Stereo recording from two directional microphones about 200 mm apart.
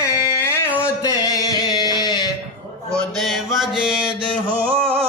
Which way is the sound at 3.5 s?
5° right (ahead or behind).